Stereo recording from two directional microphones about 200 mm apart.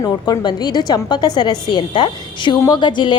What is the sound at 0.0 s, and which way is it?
A woman's voice, 20° left (ahead or behind).